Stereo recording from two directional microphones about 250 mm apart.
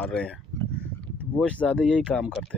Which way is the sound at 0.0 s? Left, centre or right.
Centre.